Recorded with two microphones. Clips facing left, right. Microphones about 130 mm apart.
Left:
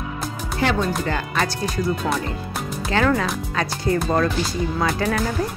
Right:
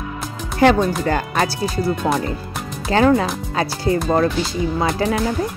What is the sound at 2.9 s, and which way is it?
Speech, 30° right (ahead or behind).